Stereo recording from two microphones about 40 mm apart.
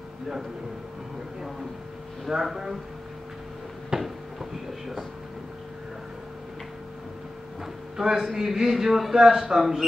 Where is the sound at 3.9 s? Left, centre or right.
Centre.